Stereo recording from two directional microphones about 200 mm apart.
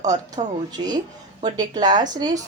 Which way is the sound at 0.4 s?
30° right (ahead or behind).